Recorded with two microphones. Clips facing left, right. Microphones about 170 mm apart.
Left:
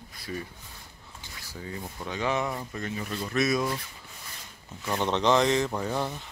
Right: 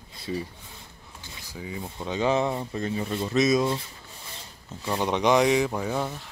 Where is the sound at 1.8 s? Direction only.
25° right (ahead or behind).